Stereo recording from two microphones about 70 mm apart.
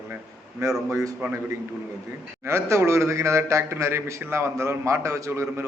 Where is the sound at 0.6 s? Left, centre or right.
Right.